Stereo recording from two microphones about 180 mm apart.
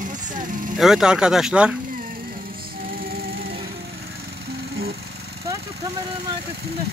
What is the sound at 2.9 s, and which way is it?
Music, 60° right (ahead or behind).